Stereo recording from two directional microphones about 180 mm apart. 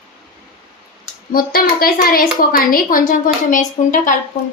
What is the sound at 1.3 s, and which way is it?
A woman's voice, 55° left (ahead or behind).